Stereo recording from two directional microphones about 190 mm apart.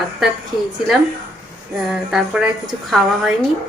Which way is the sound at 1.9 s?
5° right (ahead or behind).